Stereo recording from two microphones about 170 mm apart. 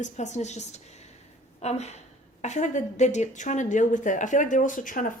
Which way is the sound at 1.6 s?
40° left (ahead or behind).